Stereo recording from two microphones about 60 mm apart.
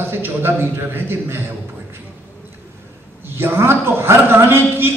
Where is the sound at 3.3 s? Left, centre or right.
Right.